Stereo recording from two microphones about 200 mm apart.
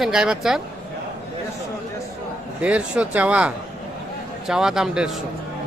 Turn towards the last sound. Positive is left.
turn(degrees=-5)  # may be behind; listen again after turning